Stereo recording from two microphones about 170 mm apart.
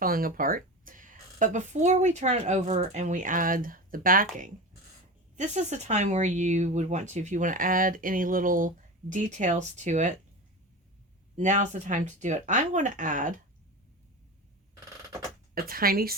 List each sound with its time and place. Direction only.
0.0 s speech: 60° right (ahead or behind)
5.4 s speech: 45° right (ahead or behind)
11.3 s speech: 45° right (ahead or behind)
15.5 s speech: 60° right (ahead or behind)